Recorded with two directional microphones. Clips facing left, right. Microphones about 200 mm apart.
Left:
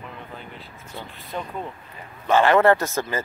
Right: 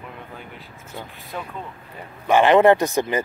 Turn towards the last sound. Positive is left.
turn(degrees=-15)  # may be behind; listen again after turning